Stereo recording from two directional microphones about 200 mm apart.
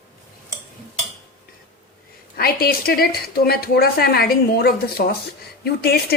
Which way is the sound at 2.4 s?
50° left (ahead or behind).